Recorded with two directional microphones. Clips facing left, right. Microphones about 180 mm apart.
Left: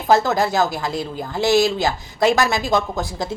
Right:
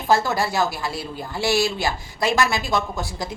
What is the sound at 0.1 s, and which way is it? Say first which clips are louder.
Speech: left 3 dB; 40° left (ahead or behind).